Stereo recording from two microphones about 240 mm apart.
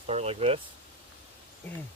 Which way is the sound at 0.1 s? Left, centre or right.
Right.